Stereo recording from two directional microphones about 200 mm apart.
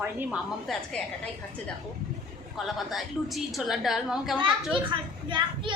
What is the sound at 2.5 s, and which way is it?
A woman's voice, centre (ahead or behind).